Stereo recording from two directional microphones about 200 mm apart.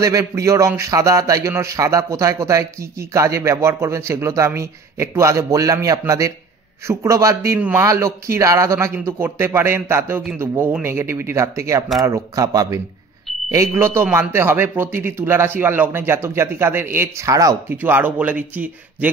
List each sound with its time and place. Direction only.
0.0 s speech: 15° right (ahead or behind)